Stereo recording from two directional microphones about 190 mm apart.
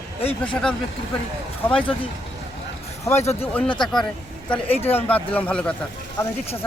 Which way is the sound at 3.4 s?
5° left (ahead or behind).